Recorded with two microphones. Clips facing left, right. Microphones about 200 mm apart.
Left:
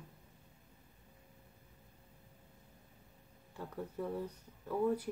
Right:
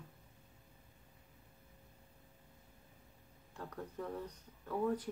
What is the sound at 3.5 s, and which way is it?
Speech, 10° left (ahead or behind).